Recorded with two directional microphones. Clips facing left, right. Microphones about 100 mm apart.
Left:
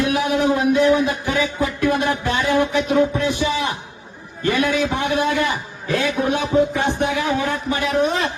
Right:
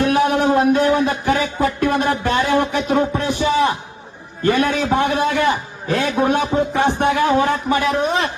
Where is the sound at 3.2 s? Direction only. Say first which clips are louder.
Right 4 dB; 45° right (ahead or behind).